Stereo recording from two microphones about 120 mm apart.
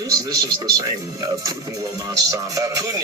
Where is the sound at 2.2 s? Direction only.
30° right (ahead or behind).